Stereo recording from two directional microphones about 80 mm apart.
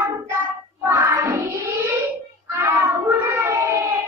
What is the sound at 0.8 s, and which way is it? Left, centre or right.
Child singing, right.